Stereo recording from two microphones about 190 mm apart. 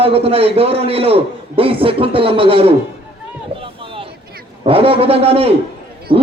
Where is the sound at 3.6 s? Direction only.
30° right (ahead or behind).